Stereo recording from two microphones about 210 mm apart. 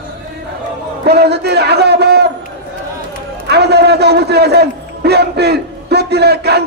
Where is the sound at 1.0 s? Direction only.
50° right (ahead or behind).